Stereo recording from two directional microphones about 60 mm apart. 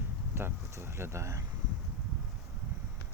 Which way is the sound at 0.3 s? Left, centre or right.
Right.